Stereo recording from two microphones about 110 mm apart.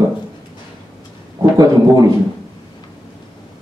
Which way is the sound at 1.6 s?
30° right (ahead or behind).